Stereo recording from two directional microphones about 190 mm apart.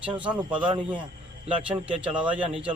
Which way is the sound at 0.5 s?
25° right (ahead or behind).